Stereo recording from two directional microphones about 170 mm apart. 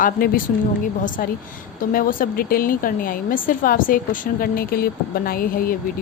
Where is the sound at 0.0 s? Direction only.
55° left (ahead or behind).